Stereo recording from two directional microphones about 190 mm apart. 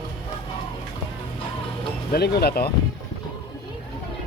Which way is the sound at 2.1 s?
55° left (ahead or behind).